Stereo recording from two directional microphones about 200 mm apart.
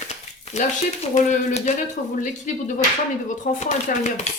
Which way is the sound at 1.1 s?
35° left (ahead or behind).